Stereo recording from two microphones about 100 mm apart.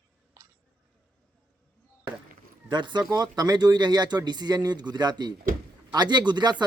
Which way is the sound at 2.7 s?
50° right (ahead or behind).